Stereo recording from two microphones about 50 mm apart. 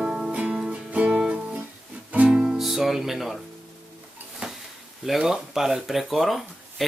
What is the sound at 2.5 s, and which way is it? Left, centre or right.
Music, centre.